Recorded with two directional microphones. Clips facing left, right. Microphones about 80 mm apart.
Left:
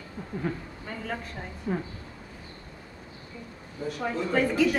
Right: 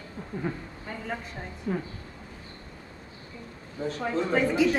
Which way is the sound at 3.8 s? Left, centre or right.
Right.